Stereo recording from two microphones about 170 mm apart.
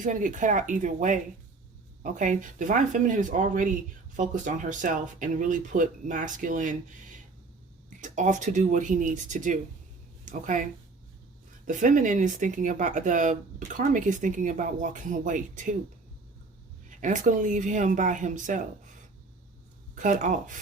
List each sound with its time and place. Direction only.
0.0 s speech: 50° right (ahead or behind)
7.9 s speech: 45° right (ahead or behind)
17.0 s speech: 50° right (ahead or behind)
20.0 s speech: 45° right (ahead or behind)